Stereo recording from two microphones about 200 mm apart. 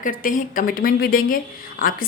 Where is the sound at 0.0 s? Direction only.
45° left (ahead or behind).